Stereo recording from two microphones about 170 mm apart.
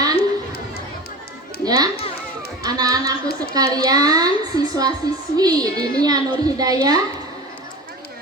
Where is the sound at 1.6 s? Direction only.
20° right (ahead or behind).